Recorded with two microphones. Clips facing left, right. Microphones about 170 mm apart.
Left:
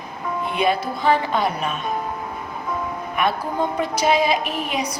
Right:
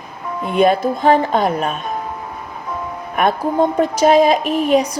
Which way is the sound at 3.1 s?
45° right (ahead or behind).